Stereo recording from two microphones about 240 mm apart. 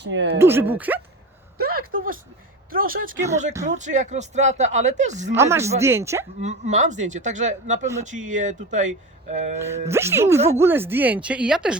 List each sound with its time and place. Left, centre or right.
0.0 s speech: right
0.3 s speech: centre
1.5 s a sound: right
2.7 s speech: right
5.3 s speech: centre
6.4 s speech: right
9.6 s speech: centre